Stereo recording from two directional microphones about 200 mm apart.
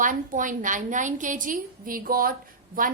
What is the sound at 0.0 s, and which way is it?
A woman's voice, 40° right (ahead or behind).